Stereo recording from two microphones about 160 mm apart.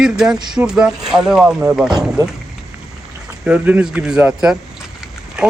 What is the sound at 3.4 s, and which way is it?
Speech, 10° right (ahead or behind).